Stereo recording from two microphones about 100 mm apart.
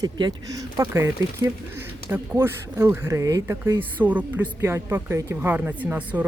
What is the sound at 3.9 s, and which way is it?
Speech, 15° right (ahead or behind).